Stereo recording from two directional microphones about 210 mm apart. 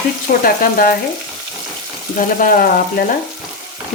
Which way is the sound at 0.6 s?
40° left (ahead or behind).